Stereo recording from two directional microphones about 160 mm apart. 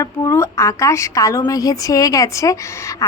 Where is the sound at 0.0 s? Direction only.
20° left (ahead or behind).